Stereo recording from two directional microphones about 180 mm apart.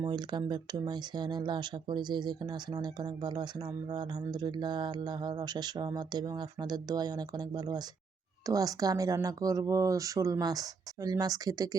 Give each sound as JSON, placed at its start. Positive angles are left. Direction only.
{"t": 0.0, "sound": "speech", "side_deg": -25}